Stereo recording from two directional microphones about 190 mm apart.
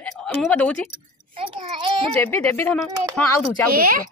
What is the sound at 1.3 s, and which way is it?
Child singing, 25° right (ahead or behind).